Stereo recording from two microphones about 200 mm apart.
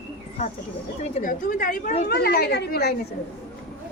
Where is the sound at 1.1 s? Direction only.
40° left (ahead or behind).